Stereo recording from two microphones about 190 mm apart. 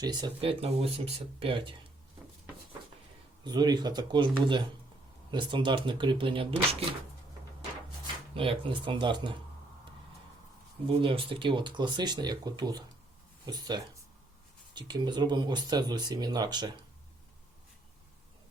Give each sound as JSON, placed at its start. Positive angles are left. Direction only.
{"t": 0.0, "sound": "speech", "side_deg": -20}
{"t": 3.4, "sound": "speech", "side_deg": -20}
{"t": 8.4, "sound": "speech", "side_deg": -25}
{"t": 10.8, "sound": "speech", "side_deg": -25}